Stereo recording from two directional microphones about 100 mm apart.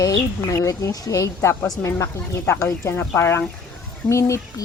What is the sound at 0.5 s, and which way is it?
Speech, 35° left (ahead or behind).